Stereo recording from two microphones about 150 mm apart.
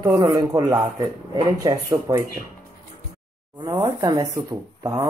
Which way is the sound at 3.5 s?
25° right (ahead or behind).